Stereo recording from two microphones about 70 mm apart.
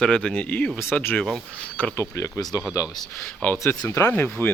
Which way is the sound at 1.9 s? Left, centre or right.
Left.